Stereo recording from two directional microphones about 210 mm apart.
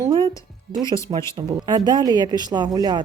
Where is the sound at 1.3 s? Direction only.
20° right (ahead or behind).